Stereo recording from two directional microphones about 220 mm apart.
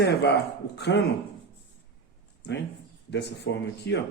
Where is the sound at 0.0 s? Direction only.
50° left (ahead or behind).